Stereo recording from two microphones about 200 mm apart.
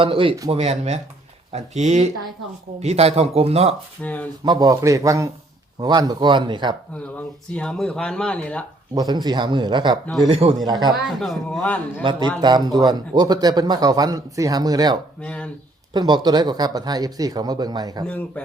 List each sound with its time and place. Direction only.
0.0 s speech: 25° right (ahead or behind)
0.5 s speech: 30° right (ahead or behind)
4.0 s a man's voice: 10° left (ahead or behind)
4.4 s a man's voice: 20° right (ahead or behind)
7.5 s speech: 5° left (ahead or behind)
9.0 s speech: 20° right (ahead or behind)
11.2 s a man's voice: centre (ahead or behind)
12.4 s speech: 20° right (ahead or behind)
15.2 s speech: 5° left (ahead or behind)
15.9 s speech: 20° right (ahead or behind)
18.0 s a man's voice: 5° left (ahead or behind)